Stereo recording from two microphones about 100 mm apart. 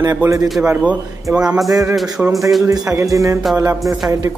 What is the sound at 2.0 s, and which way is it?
Speech, centre (ahead or behind).